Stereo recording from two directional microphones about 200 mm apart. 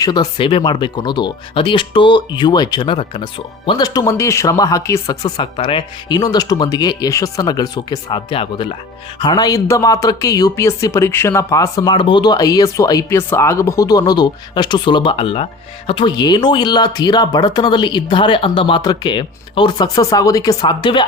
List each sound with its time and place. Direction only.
0.0 s speech: 20° left (ahead or behind)